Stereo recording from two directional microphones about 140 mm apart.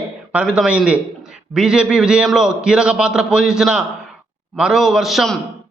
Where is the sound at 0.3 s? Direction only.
5° right (ahead or behind).